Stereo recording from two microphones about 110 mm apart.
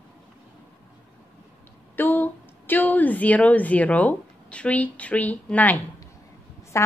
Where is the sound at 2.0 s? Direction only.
20° left (ahead or behind).